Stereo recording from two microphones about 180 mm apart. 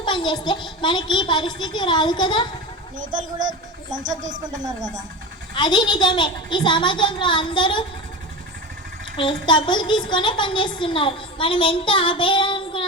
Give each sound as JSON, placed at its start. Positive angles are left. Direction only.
{"t": 0.0, "sound": "a child's voice", "side_deg": 25}
{"t": 4.4, "sound": "speech", "side_deg": -20}
{"t": 5.5, "sound": "a child's voice", "side_deg": 25}
{"t": 9.1, "sound": "a child's voice", "side_deg": 25}